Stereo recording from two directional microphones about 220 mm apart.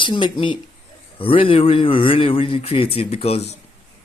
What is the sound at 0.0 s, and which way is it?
Speech, 20° left (ahead or behind).